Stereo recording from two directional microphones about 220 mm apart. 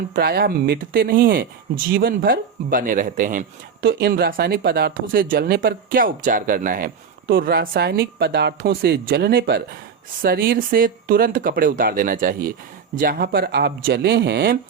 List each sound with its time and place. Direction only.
0.1 s speech: 45° right (ahead or behind)